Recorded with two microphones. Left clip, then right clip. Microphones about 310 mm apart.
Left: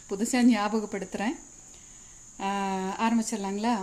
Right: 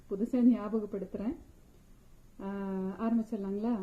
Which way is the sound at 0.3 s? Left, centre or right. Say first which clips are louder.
Left 5 dB; centre.